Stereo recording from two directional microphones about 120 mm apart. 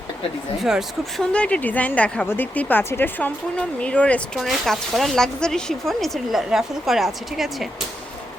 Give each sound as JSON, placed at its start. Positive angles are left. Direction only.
{"t": 0.6, "sound": "speech", "side_deg": 0}
{"t": 1.3, "sound": "speech", "side_deg": 10}